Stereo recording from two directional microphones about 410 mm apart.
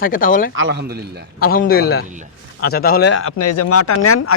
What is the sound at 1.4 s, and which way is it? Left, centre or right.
Speech, left.